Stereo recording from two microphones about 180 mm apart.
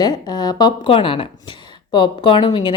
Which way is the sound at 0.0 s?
20° left (ahead or behind).